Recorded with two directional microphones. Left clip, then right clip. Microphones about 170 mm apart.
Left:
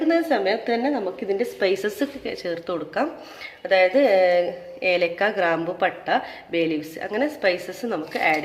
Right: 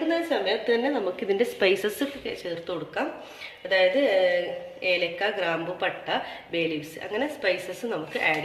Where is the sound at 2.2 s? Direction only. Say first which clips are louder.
Left 4 dB; 30° left (ahead or behind).